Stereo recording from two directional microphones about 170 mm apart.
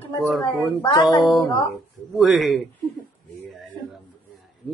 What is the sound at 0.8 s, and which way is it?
Music, 25° left (ahead or behind).